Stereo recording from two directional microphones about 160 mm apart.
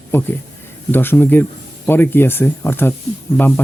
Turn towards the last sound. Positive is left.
turn(degrees=10)  # may be behind; listen again after turning